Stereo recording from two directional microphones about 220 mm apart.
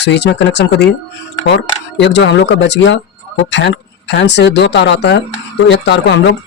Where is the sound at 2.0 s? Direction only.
55° left (ahead or behind).